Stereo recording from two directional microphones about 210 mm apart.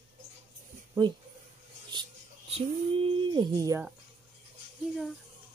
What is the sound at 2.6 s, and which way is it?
Speech, 25° right (ahead or behind).